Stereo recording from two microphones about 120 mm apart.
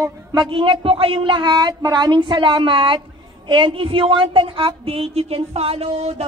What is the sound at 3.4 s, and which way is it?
A woman's voice, 45° right (ahead or behind).